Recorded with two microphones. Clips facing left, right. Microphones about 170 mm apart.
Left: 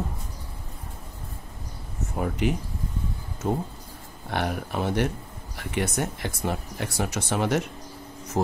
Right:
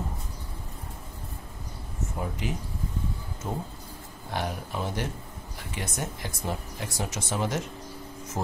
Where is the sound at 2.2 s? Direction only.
65° left (ahead or behind).